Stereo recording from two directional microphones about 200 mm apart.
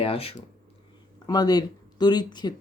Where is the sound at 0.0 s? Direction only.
30° left (ahead or behind).